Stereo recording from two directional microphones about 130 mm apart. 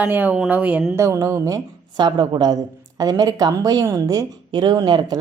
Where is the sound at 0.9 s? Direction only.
20° right (ahead or behind).